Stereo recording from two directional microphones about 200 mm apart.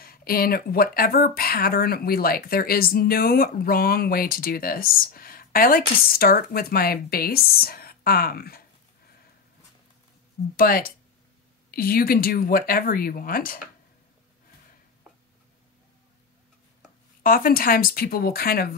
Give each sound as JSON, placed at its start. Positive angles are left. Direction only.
{"t": 0.0, "sound": "speech", "side_deg": 50}
{"t": 10.5, "sound": "speech", "side_deg": 45}
{"t": 17.2, "sound": "speech", "side_deg": 45}